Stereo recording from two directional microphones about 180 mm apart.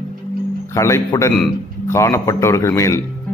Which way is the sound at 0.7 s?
15° left (ahead or behind).